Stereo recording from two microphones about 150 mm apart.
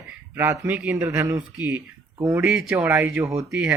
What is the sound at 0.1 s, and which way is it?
Speech, 15° right (ahead or behind).